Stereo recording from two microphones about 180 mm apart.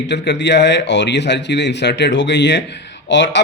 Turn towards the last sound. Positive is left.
turn(degrees=85)